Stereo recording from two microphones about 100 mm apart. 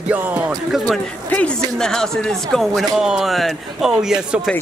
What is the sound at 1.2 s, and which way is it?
Speech, 15° left (ahead or behind).